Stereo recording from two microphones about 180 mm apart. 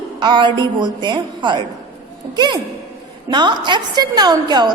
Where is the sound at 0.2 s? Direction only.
25° right (ahead or behind).